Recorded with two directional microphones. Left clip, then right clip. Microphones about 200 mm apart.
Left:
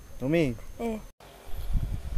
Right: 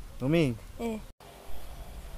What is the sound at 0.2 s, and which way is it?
Speech, 30° right (ahead or behind).